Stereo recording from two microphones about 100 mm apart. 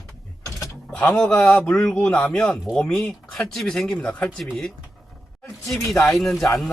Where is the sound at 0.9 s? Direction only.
15° left (ahead or behind).